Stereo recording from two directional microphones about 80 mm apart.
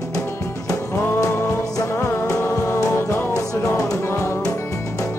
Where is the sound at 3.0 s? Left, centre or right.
Left.